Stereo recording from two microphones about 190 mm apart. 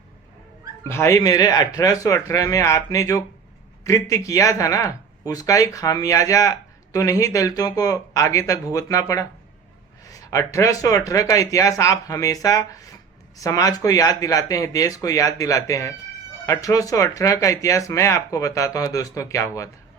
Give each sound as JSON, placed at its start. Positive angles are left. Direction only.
{"t": 0.9, "sound": "speech", "side_deg": 15}